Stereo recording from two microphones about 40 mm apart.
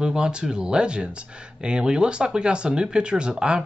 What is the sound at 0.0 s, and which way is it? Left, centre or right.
Speech, right.